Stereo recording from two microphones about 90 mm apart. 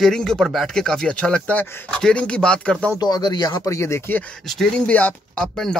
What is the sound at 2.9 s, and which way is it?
Speech, 50° left (ahead or behind).